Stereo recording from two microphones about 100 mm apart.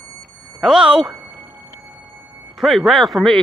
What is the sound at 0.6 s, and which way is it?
Speech, 5° right (ahead or behind).